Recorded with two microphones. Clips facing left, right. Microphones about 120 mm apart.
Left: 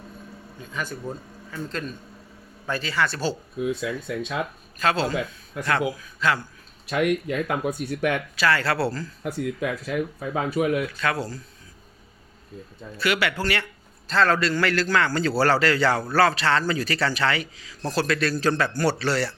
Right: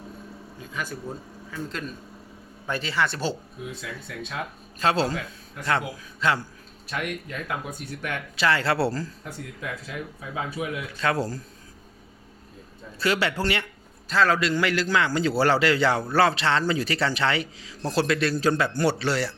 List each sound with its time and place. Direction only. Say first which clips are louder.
0.6 s speech: left 2 dB; 5° right (ahead or behind)
2.6 s a man's voice: left 1 dB; 20° right (ahead or behind)
4.8 s a man's voice: even; 30° right (ahead or behind)
6.1 s a man's voice: right 1 dB; 30° right (ahead or behind)
6.9 s speech: left 9 dB; 90° left
8.4 s a man's voice: right 2 dB; 25° right (ahead or behind)
9.2 s speech: left 9 dB; 90° left
11.0 s speech: right 1 dB; 35° right (ahead or behind)
13.0 s a man's voice: even; 30° right (ahead or behind)
14.1 s a man's voice: left 1 dB; 10° right (ahead or behind)